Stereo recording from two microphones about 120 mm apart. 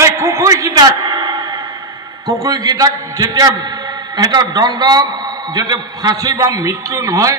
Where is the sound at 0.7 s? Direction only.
35° right (ahead or behind).